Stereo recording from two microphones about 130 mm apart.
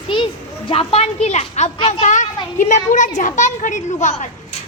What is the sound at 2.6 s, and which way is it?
A woman's voice, 70° left (ahead or behind).